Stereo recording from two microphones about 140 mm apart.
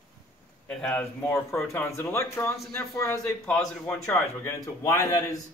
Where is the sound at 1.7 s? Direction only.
15° left (ahead or behind).